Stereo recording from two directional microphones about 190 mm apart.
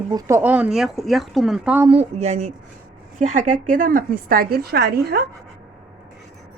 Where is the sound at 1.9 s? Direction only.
35° right (ahead or behind); by 5.2 s 55° right (ahead or behind).